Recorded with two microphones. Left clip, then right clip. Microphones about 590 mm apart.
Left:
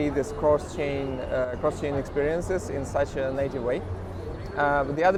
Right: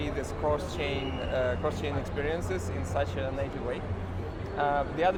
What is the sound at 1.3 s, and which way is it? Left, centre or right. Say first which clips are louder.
A man's voice: left 3 dB; left.